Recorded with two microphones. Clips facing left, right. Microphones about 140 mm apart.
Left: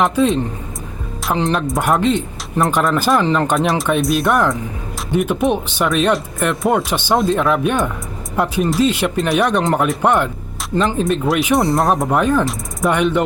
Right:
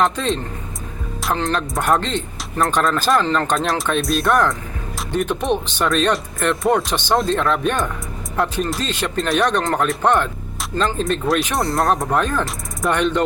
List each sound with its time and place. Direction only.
0.0 s speech: 5° left (ahead or behind)
1.5 s speech: centre (ahead or behind)
11.0 s speech: centre (ahead or behind)